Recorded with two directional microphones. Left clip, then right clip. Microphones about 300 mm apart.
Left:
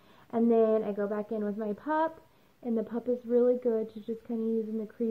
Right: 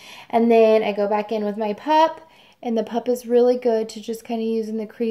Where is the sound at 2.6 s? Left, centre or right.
Right.